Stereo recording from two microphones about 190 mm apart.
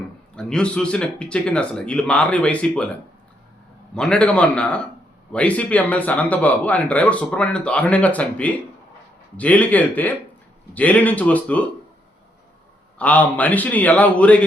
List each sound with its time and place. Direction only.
0.3 s speech: 5° left (ahead or behind)
3.9 s a man's voice: 5° left (ahead or behind)
13.0 s a man's voice: 10° left (ahead or behind)